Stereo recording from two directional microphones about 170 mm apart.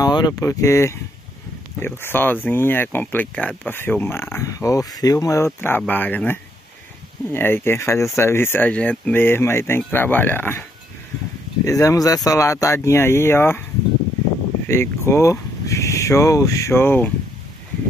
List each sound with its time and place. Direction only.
0.0 s speech: 25° left (ahead or behind)
11.6 s speech: 20° left (ahead or behind)
14.7 s speech: 15° left (ahead or behind)